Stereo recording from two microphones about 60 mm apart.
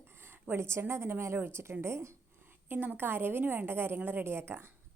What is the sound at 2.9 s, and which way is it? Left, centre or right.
A woman's voice, right.